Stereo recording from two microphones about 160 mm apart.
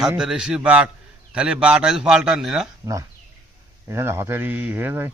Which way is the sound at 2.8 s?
20° right (ahead or behind).